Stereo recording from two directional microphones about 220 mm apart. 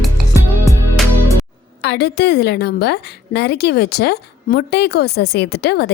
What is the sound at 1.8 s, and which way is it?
A woman's voice, 50° left (ahead or behind).